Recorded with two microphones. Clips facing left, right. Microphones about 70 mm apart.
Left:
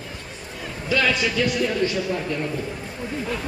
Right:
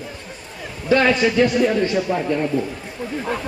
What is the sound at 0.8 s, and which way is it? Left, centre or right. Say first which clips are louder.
A man's voice: right 6 dB; right.